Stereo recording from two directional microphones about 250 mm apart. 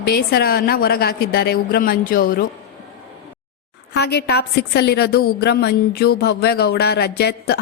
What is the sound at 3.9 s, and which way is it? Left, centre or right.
A woman's voice, left.